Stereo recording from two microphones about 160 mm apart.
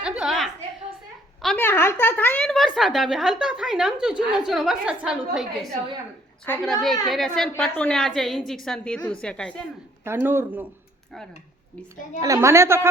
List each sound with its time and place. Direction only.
0.0 s a sound: 5° right (ahead or behind)
1.6 s a woman's voice: 15° left (ahead or behind); by 5.7 s 5° right (ahead or behind)
6.4 s a woman's voice: 10° left (ahead or behind)
10.0 s a woman's voice: 15° right (ahead or behind)
12.2 s a woman's voice: 20° right (ahead or behind)